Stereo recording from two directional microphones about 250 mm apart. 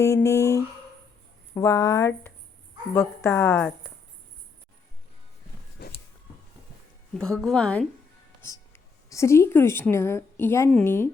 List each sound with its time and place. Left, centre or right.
0.0 s speech: centre
5.8 s a sound: left
7.2 s a woman's voice: centre